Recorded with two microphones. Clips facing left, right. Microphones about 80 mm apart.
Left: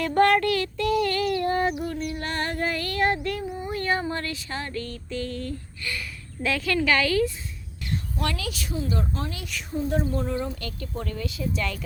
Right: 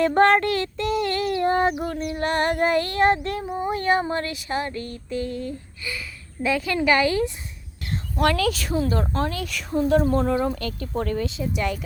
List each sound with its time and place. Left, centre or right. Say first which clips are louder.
0.0 s female singing: right 3 dB; right
1.8 s female singing: right 4 dB; right
3.7 s female singing: right 5 dB; right
6.4 s a woman's voice: right 3 dB; centre
6.7 s female singing: right 2 dB; right
8.2 s speech: right 12 dB; right
9.6 s speech: right 7 dB; right
10.0 s speech: right 6 dB; right
10.6 s speech: right 6 dB; right
11.3 s female singing: right 3 dB; right